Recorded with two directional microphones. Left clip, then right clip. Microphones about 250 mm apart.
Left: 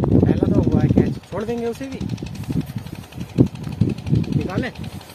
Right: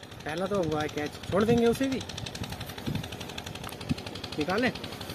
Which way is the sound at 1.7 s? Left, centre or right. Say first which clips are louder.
Even; right.